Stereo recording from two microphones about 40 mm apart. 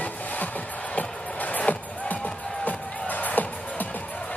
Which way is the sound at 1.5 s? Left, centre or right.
Left.